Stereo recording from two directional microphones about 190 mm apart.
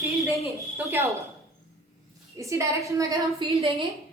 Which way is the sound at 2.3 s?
15° right (ahead or behind).